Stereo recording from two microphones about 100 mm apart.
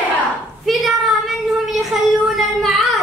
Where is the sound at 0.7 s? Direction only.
Centre (ahead or behind).